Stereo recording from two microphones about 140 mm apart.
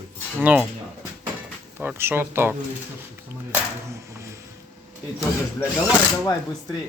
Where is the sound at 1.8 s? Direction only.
15° right (ahead or behind).